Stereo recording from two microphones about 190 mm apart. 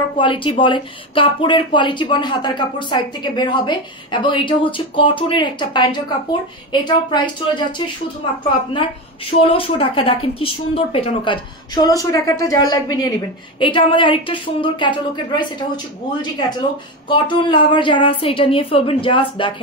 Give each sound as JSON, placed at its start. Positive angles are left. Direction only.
{"t": 0.2, "sound": "a woman's voice", "side_deg": 25}